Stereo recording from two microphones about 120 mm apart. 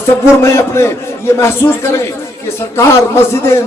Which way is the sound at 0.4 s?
20° left (ahead or behind).